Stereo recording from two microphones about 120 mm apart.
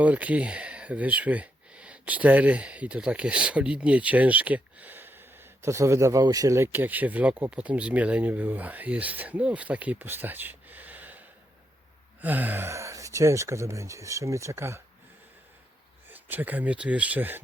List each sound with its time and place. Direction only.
0.0 s speech: 10° right (ahead or behind)
12.2 s speech: 15° right (ahead or behind)
16.0 s speech: 15° right (ahead or behind)